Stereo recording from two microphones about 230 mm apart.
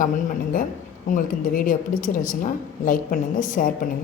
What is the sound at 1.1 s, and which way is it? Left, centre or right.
A woman's voice, left.